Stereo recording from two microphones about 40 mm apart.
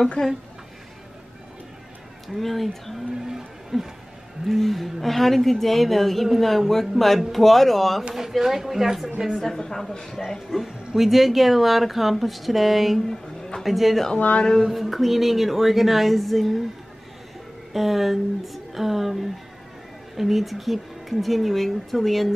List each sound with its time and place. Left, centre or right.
0.2 s a woman's voice: centre
2.2 s a woman's voice: centre
3.2 s a sound: centre
4.5 s a woman's voice: centre
8.1 s speech: centre
9.4 s a woman's voice: centre
11.0 s a woman's voice: centre
13.1 s speech: centre
13.7 s a woman's voice: centre
14.1 s a sound: left
14.6 s a woman's voice: centre
17.7 s a woman's voice: centre